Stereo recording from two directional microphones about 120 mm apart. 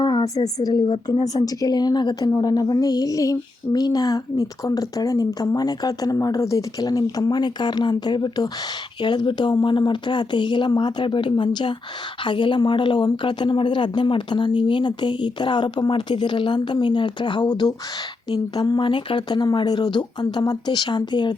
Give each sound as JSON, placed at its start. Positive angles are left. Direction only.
{"t": 0.0, "sound": "speech", "side_deg": 35}